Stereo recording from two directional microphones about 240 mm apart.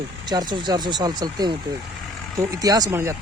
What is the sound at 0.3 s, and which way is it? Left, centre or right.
Speech, centre.